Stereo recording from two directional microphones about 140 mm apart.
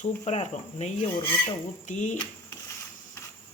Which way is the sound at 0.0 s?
55° left (ahead or behind).